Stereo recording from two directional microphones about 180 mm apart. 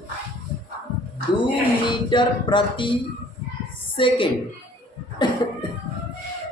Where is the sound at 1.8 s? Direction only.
25° left (ahead or behind).